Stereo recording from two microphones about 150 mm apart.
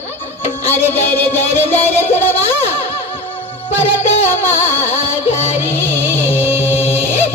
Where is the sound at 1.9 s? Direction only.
15° left (ahead or behind).